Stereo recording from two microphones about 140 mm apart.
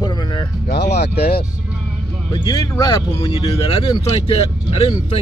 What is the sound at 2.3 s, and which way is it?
Speech, 30° left (ahead or behind).